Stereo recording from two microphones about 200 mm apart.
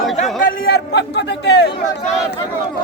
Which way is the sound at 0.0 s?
Centre (ahead or behind).